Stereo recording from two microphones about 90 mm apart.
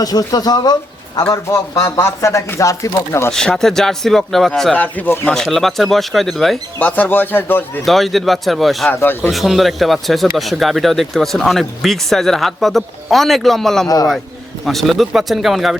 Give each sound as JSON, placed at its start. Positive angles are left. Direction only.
{"t": 0.0, "sound": "speech", "side_deg": 45}
{"t": 1.3, "sound": "speech", "side_deg": 35}
{"t": 3.3, "sound": "speech", "side_deg": 5}
{"t": 4.7, "sound": "speech", "side_deg": 20}
{"t": 5.3, "sound": "speech", "side_deg": 5}
{"t": 6.7, "sound": "speech", "side_deg": 20}
{"t": 7.9, "sound": "speech", "side_deg": 0}
{"t": 8.9, "sound": "speech", "side_deg": 25}
{"t": 9.3, "sound": "speech", "side_deg": 0}
{"t": 13.8, "sound": "speech", "side_deg": 45}
{"t": 14.6, "sound": "speech", "side_deg": 0}